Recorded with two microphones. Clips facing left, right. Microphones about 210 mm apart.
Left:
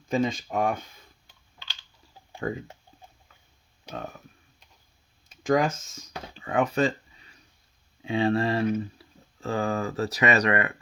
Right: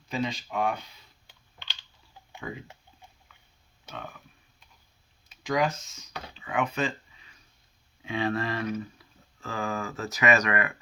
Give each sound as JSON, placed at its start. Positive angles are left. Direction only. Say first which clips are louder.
{"t": 0.1, "sound": "speech", "louder": "left 5 dB", "side_deg": 50}
{"t": 2.4, "sound": "speech", "louder": "left 7 dB", "side_deg": 45}
{"t": 3.9, "sound": "speech", "louder": "left 5 dB", "side_deg": 40}
{"t": 5.4, "sound": "speech", "louder": "left 4 dB", "side_deg": 50}